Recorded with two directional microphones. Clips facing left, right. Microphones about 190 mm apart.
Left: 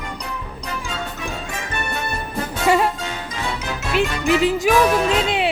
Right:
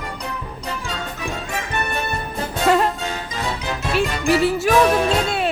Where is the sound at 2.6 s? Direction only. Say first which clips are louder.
Even; 10° left (ahead or behind).